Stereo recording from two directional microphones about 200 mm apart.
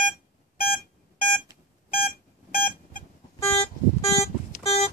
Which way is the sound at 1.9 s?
50° left (ahead or behind).